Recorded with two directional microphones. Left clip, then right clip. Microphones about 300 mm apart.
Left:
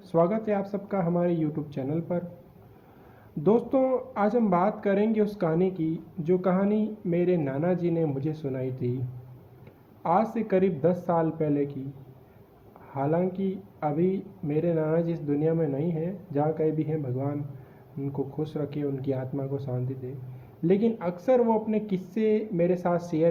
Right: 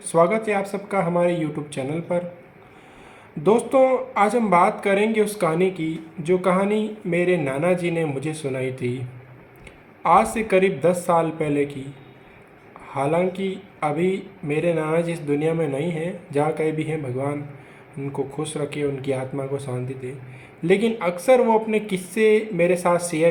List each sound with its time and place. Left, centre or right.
0.1 s speech: centre
3.4 s speech: centre
10.0 s speech: centre
12.9 s speech: centre
18.3 s speech: centre